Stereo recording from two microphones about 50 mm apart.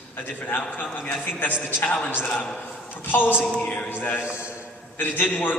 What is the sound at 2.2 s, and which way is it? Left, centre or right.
A man's voice, left.